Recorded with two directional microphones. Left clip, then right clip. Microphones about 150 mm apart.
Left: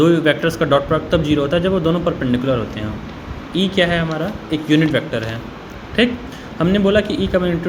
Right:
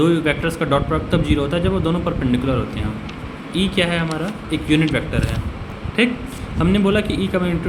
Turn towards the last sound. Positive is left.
turn(degrees=10)  # may be behind; listen again after turning